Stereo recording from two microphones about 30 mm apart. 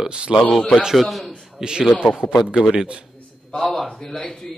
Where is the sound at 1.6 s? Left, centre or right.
Right.